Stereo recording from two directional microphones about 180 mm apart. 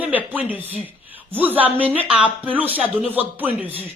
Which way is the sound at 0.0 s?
10° right (ahead or behind).